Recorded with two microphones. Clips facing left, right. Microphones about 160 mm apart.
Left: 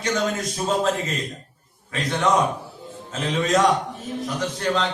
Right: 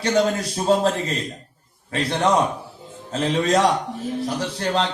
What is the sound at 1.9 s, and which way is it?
A man's voice, 35° right (ahead or behind).